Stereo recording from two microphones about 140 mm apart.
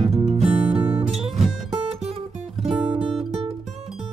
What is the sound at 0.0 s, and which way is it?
Music, 50° right (ahead or behind).